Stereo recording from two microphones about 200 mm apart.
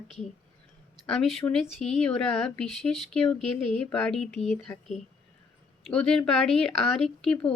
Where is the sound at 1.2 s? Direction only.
Centre (ahead or behind).